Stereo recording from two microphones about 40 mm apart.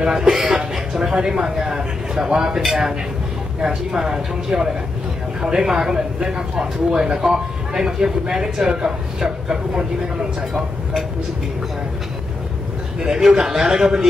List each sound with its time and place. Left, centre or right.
0.1 s a woman's voice: centre
3.6 s speech: centre
13.0 s speech: centre